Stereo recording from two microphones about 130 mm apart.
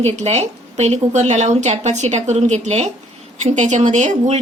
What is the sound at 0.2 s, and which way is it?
Speech, 55° right (ahead or behind).